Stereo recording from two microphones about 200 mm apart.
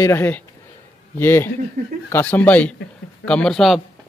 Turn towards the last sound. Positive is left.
turn(degrees=0)  # may be behind; listen again after turning